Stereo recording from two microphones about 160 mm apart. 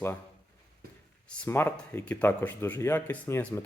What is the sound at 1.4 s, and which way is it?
Speech, 10° left (ahead or behind).